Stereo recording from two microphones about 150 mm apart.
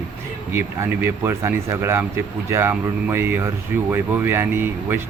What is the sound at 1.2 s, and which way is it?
Speech, 15° right (ahead or behind).